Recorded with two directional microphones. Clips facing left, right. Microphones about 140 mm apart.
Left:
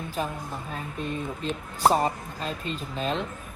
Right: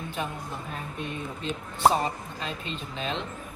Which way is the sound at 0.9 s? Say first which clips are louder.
Left 5 dB; 35° left (ahead or behind).